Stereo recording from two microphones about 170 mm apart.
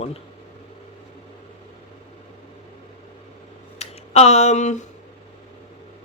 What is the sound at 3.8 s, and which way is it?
Speech, 40° left (ahead or behind).